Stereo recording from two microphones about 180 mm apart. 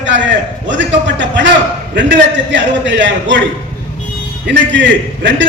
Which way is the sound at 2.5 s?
90° right.